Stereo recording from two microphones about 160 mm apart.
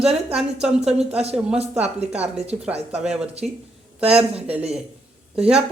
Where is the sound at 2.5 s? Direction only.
10° right (ahead or behind).